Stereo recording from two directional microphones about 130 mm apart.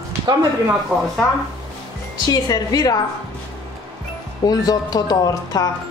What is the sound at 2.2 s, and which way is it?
Speech, 30° left (ahead or behind).